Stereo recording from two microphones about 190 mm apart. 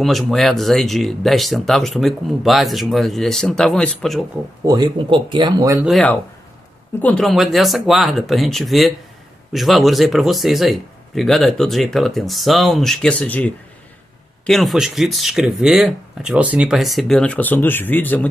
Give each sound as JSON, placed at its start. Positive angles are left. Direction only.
{"t": 0.0, "sound": "speech", "side_deg": 0}
{"t": 4.6, "sound": "speech", "side_deg": -20}
{"t": 5.9, "sound": "speech", "side_deg": 0}